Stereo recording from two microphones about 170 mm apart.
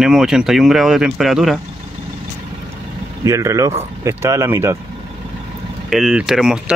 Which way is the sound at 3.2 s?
15° right (ahead or behind).